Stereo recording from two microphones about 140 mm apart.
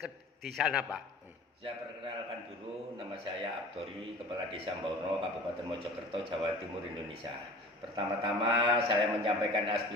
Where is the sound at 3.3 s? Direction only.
35° right (ahead or behind).